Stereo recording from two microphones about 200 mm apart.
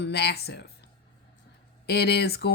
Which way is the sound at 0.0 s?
55° left (ahead or behind).